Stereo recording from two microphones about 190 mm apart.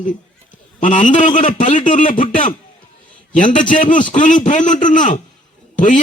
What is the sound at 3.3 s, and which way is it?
A man's voice, 40° left (ahead or behind).